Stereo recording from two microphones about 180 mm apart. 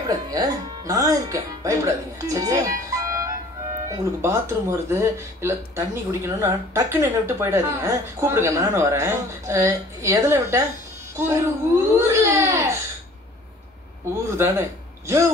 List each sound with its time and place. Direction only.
0.1 s speech: 20° right (ahead or behind)
11.1 s baby cry: 15° right (ahead or behind)
14.3 s speech: 15° right (ahead or behind)